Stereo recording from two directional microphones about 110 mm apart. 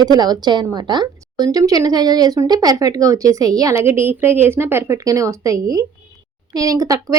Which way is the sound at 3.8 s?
20° right (ahead or behind).